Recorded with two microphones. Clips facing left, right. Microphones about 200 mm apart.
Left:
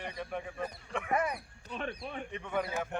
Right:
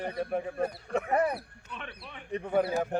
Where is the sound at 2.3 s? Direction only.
35° right (ahead or behind).